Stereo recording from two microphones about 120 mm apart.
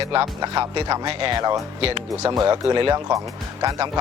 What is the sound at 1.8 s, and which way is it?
Speech, 55° right (ahead or behind).